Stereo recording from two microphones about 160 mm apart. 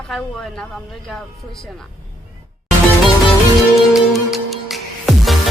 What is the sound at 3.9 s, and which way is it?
Music, centre (ahead or behind).